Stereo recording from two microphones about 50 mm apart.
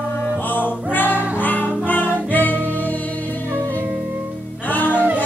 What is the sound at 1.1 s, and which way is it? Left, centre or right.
Music, right.